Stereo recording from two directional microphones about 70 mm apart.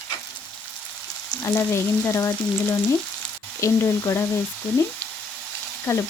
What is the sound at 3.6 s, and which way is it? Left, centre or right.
Frying, left.